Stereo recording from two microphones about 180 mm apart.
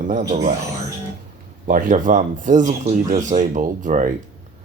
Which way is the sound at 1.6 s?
45° right (ahead or behind).